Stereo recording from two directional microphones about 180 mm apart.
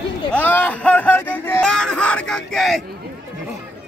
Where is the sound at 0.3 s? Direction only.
10° left (ahead or behind).